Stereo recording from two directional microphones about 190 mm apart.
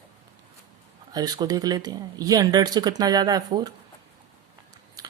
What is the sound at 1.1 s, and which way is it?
Speech, 20° right (ahead or behind).